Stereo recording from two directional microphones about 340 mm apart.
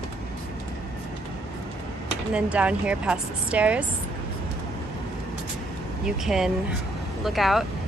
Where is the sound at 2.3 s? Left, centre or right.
Centre.